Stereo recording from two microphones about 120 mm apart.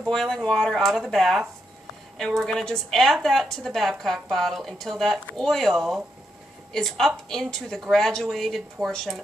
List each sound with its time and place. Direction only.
0.0 s a woman's voice: 5° left (ahead or behind)